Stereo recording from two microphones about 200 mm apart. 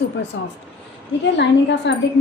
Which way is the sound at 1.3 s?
60° left (ahead or behind).